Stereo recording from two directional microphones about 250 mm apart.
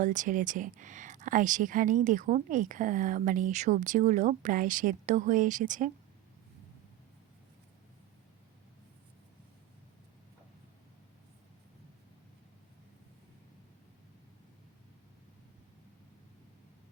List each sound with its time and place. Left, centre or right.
0.0 s speech: right